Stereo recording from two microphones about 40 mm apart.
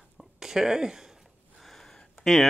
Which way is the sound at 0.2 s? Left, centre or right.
Centre.